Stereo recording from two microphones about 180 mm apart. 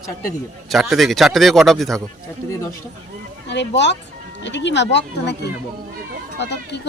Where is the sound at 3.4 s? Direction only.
75° left (ahead or behind).